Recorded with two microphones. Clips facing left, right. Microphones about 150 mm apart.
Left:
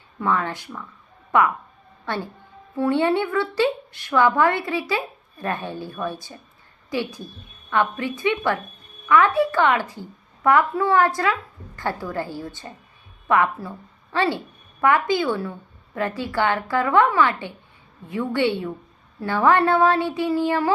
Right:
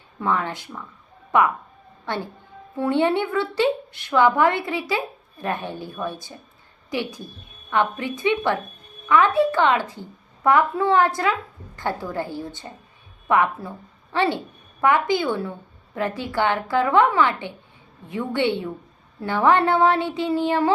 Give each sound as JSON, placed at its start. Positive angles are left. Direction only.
{"t": 0.2, "sound": "speech", "side_deg": -20}
{"t": 2.0, "sound": "speech", "side_deg": -15}
{"t": 7.7, "sound": "a woman's voice", "side_deg": -20}